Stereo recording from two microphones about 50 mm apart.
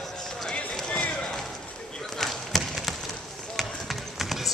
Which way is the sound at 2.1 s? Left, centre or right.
Centre.